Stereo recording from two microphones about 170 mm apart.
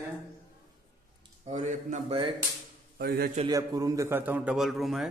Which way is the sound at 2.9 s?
65° right (ahead or behind).